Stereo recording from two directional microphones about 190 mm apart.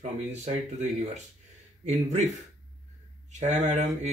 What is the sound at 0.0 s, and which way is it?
Speech, 40° right (ahead or behind).